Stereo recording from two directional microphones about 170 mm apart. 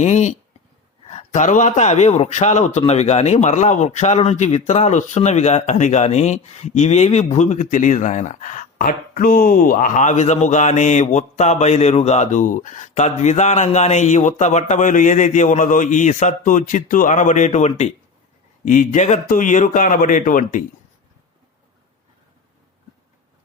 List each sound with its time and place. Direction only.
0.0 s a man's voice: 45° left (ahead or behind)